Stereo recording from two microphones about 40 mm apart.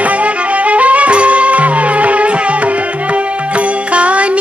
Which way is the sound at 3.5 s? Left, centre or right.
Right.